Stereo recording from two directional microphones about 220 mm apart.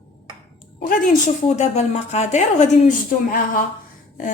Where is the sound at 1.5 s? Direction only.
30° left (ahead or behind).